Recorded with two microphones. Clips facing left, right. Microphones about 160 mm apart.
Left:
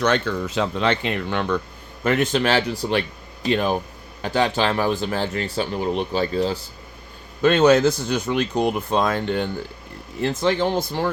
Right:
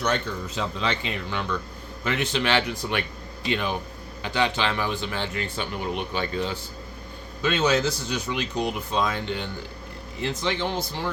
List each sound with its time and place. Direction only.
0.0 s speech: 90° left; by 1.5 s 55° left (ahead or behind)
2.0 s speech: 45° left (ahead or behind)
7.4 s speech: 50° left (ahead or behind)